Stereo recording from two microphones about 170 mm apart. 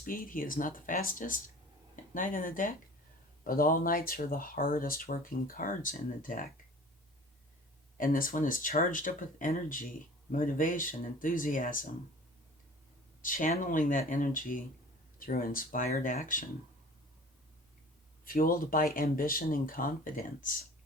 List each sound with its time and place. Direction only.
0.0 s speech: 55° left (ahead or behind)
7.9 s speech: 55° left (ahead or behind)
13.2 s speech: 50° left (ahead or behind)
18.3 s speech: 55° left (ahead or behind)